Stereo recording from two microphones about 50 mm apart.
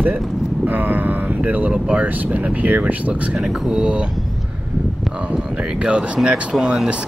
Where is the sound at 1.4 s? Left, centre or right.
Right.